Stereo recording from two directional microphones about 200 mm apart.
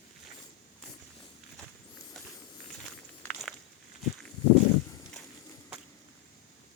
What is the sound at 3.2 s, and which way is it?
Walk, centre (ahead or behind).